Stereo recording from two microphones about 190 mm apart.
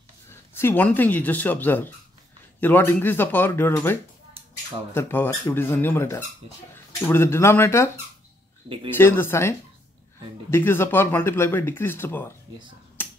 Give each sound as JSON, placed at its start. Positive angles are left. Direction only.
{"t": 0.3, "sound": "speech", "side_deg": 10}
{"t": 8.6, "sound": "speech", "side_deg": -30}
{"t": 8.9, "sound": "speech", "side_deg": 10}
{"t": 13.0, "sound": "finger snapping", "side_deg": 10}